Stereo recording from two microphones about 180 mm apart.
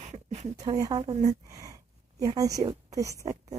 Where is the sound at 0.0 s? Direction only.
40° right (ahead or behind).